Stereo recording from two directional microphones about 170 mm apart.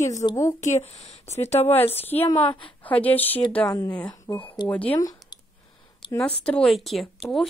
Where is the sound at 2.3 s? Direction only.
30° left (ahead or behind).